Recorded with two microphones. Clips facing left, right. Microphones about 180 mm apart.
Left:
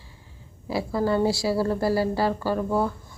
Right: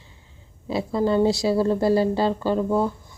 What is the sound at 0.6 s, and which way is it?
Speech, 20° right (ahead or behind).